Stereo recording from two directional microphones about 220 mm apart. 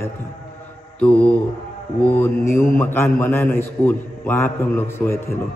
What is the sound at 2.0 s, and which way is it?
A man's voice, 10° left (ahead or behind).